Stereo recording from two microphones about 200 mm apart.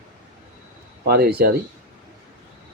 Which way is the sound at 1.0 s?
50° right (ahead or behind).